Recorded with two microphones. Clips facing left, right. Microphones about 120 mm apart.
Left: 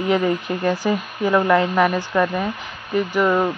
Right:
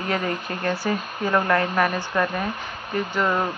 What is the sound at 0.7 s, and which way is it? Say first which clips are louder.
Speech: left 4 dB; 15° left (ahead or behind).